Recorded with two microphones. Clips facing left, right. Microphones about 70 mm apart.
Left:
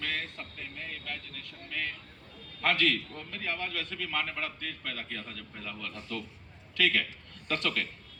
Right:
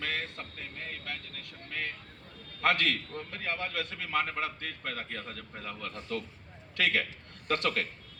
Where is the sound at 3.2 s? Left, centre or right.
Right.